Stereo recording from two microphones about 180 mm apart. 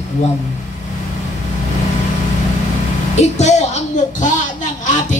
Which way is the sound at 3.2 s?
40° left (ahead or behind).